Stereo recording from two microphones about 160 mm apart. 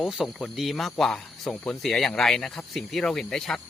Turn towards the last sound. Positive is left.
turn(degrees=5)  # may be behind; listen again after turning